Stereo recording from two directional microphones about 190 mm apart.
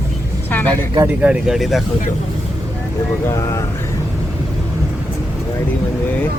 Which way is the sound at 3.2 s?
15° left (ahead or behind).